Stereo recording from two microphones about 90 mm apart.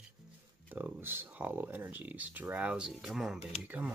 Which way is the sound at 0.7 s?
20° right (ahead or behind).